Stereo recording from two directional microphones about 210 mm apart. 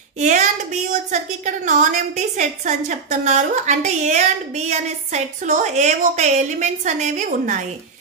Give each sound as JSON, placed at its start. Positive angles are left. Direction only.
{"t": 0.2, "sound": "a woman's voice", "side_deg": -35}